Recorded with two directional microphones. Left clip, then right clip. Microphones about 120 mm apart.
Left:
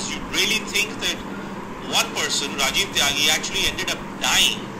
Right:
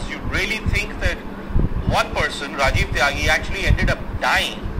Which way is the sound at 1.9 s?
55° right (ahead or behind).